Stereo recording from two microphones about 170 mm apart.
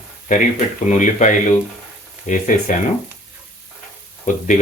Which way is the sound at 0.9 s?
45° left (ahead or behind).